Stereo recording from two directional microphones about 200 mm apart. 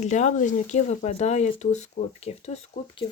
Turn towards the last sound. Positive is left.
turn(degrees=30)  # may be behind; listen again after turning